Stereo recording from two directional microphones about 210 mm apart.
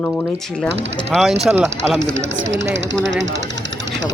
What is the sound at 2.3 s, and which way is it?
Speech, 60° right (ahead or behind).